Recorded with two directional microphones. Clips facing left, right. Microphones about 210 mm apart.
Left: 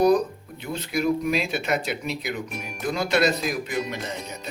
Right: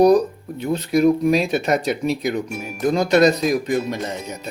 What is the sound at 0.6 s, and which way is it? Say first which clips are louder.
Speech: right 9 dB; 40° right (ahead or behind).